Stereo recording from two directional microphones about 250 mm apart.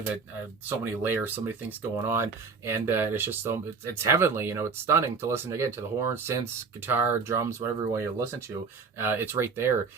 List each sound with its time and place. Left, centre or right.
0.8 s speech: centre